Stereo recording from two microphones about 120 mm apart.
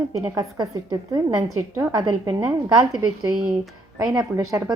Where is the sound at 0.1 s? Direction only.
30° right (ahead or behind).